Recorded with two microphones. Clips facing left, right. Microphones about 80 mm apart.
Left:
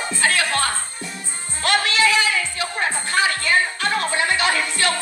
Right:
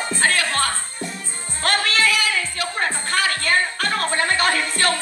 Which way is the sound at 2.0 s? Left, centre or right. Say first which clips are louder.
Left 2 dB; left.